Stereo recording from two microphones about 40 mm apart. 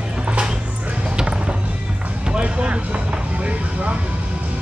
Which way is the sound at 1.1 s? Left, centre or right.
Centre.